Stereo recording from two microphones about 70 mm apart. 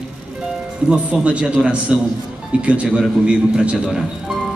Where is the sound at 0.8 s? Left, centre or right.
Centre.